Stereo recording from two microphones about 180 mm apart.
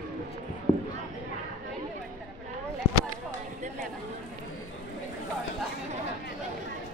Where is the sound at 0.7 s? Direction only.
20° left (ahead or behind).